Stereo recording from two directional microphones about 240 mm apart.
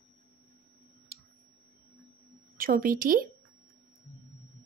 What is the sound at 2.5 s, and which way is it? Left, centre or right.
Speech, right.